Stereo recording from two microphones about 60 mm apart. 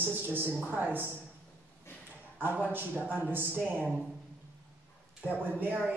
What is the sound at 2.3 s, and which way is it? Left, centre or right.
Speech, right.